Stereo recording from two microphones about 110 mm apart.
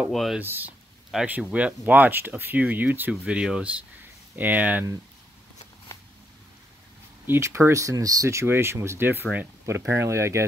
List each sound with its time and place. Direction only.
0.1 s speech: centre (ahead or behind)
0.4 s speech: 20° right (ahead or behind)
7.2 s speech: 25° right (ahead or behind)